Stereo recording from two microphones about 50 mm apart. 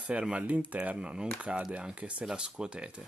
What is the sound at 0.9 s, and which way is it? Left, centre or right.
Speech, centre.